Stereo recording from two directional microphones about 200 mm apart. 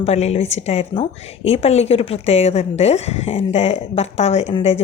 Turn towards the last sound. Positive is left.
turn(degrees=30)  # may be behind; listen again after turning